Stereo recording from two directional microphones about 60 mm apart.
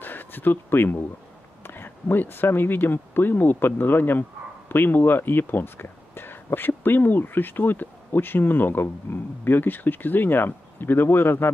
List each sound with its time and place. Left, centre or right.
0.0 s speech: left